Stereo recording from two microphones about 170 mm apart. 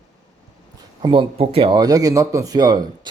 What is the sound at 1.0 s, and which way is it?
Speech, 30° right (ahead or behind).